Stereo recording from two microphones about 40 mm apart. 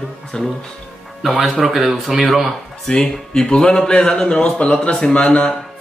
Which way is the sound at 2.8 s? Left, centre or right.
Centre.